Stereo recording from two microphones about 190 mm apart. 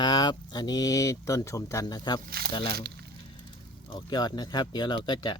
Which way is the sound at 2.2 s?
55° right (ahead or behind).